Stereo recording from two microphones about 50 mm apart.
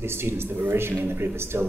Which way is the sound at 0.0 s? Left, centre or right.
Right.